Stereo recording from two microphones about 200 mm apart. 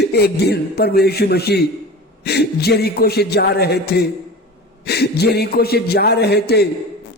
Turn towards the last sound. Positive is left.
turn(degrees=55)  # may be behind; listen again after turning